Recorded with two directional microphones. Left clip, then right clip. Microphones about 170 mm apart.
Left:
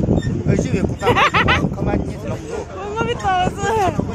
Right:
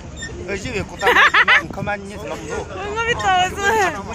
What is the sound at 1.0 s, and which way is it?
Speech, centre (ahead or behind).